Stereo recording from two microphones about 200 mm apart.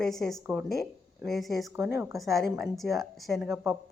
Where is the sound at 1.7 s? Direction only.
10° right (ahead or behind).